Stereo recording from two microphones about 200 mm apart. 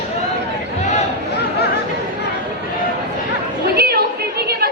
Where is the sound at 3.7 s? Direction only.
50° right (ahead or behind).